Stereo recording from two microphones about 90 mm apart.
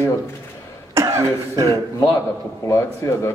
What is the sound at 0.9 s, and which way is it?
Speech, 35° right (ahead or behind).